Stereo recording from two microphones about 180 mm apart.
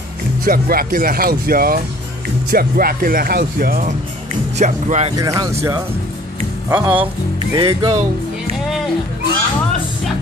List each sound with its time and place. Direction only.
0.5 s speech: 55° right (ahead or behind)
4.6 s speech: 40° right (ahead or behind)
5.1 s speech: 20° right (ahead or behind)
7.3 s music: 25° right (ahead or behind)